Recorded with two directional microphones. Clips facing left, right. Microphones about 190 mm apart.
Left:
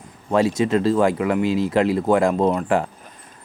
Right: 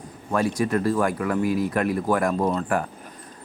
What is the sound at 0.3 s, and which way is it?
Speech, 25° left (ahead or behind).